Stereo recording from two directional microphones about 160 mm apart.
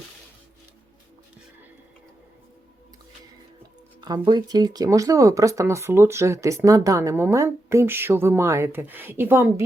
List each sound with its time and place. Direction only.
4.0 s speech: 25° right (ahead or behind)